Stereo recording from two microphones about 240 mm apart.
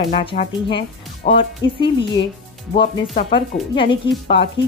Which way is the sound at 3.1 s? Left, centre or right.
Left.